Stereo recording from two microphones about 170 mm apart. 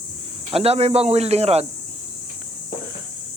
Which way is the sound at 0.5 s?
35° right (ahead or behind).